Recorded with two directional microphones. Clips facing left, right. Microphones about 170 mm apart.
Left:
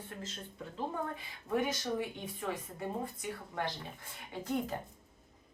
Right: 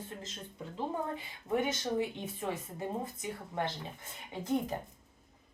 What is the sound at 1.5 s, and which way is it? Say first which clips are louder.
Speech: right 1 dB; 25° right (ahead or behind).